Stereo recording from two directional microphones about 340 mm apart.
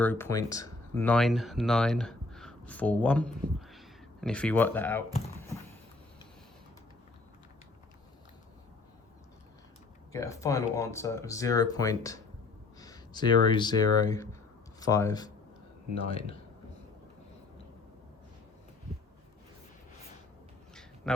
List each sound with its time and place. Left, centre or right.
0.0 s speech: centre
10.1 s speech: centre